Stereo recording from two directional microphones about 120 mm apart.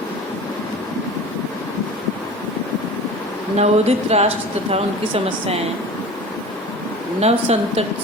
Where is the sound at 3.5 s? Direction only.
60° right (ahead or behind).